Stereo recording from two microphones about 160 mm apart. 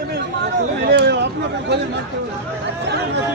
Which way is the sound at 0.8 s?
90° right.